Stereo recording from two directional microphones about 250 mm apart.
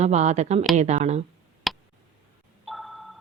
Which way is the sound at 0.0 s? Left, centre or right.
Right.